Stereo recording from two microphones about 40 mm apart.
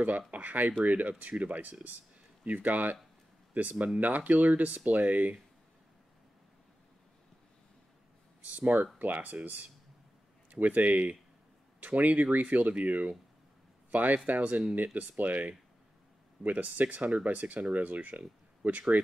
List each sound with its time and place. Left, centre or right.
0.3 s speech: right
3.7 s speech: right
4.0 s speech: right
8.5 s speech: right